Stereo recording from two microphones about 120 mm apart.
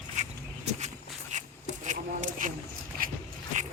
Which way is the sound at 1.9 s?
90° right.